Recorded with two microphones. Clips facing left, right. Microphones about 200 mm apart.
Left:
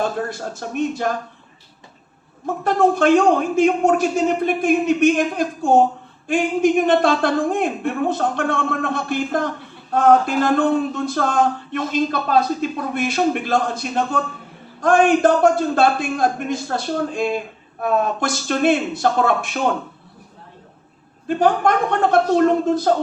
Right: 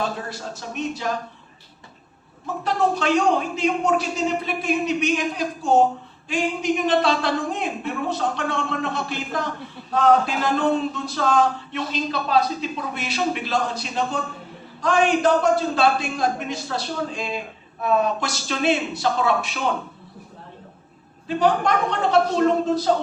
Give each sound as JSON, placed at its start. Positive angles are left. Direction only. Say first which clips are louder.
{"t": 0.0, "sound": "a man's voice", "louder": "left 5 dB", "side_deg": 50}
{"t": 2.6, "sound": "a man's voice", "louder": "left 6 dB", "side_deg": 50}
{"t": 21.2, "sound": "a man's voice", "louder": "left 3 dB", "side_deg": 50}